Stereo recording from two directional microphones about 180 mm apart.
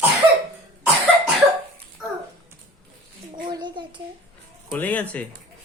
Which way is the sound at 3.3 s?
25° right (ahead or behind).